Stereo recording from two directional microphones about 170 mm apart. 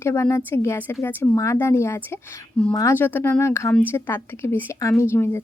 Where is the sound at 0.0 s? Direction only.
15° left (ahead or behind).